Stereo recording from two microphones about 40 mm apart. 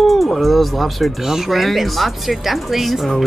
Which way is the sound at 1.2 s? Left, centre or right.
Centre.